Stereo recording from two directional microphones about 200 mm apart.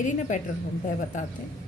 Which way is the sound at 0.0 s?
40° left (ahead or behind).